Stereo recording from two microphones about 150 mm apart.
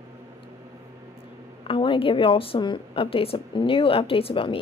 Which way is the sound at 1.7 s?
35° left (ahead or behind).